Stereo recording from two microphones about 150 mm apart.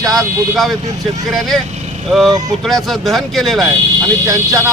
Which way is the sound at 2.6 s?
Centre (ahead or behind).